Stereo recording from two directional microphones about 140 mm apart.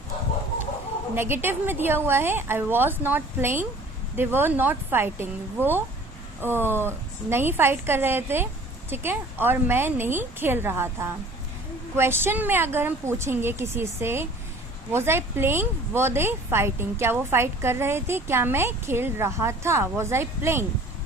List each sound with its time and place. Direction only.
1.1 s speech: 15° right (ahead or behind)